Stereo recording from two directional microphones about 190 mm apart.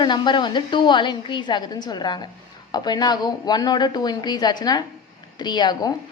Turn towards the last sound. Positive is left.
turn(degrees=20)  # may be behind; listen again after turning